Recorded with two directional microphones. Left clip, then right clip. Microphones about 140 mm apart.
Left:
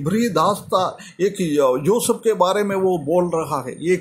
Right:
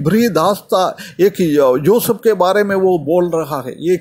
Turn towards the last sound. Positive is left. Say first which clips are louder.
# right 4 dB
turn(degrees=-20)  # may be behind; listen again after turning